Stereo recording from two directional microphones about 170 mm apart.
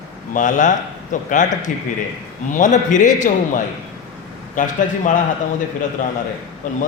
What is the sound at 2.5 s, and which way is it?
A man's voice, 50° left (ahead or behind).